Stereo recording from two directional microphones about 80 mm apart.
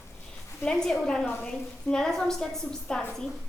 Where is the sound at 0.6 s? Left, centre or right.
Centre.